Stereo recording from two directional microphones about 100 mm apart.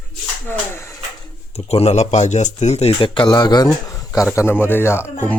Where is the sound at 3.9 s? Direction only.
35° left (ahead or behind).